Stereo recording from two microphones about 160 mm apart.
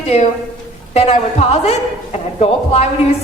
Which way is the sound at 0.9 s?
40° left (ahead or behind).